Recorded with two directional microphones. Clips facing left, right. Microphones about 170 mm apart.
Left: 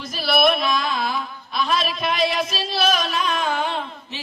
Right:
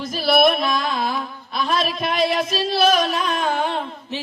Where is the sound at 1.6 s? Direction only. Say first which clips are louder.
Right 1 dB; 50° right (ahead or behind).